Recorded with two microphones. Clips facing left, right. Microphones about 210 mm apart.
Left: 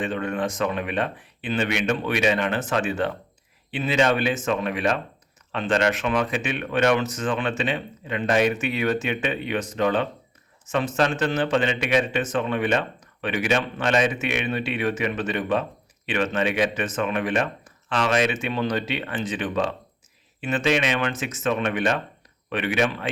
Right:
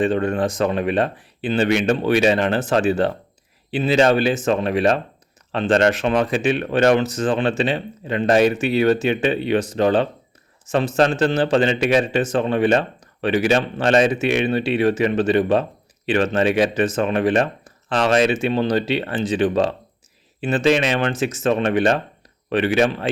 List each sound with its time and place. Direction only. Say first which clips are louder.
0.0 s speech: right 7 dB; 30° right (ahead or behind)